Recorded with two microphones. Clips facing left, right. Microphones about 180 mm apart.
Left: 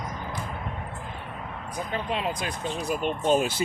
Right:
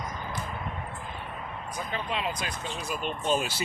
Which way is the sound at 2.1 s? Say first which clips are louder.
Left 2 dB; 50° left (ahead or behind).